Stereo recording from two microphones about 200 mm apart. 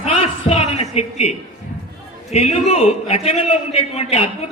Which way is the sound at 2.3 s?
30° left (ahead or behind).